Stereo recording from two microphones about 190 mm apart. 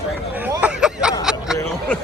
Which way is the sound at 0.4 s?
10° right (ahead or behind).